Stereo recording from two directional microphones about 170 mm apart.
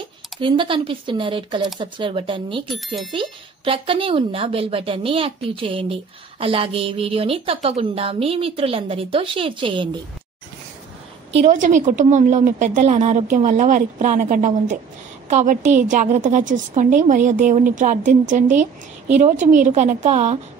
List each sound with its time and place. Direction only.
0.4 s a woman's voice: 30° right (ahead or behind)
11.4 s a woman's voice: 50° right (ahead or behind)